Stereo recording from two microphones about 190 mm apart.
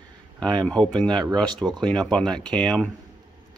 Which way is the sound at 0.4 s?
5° left (ahead or behind).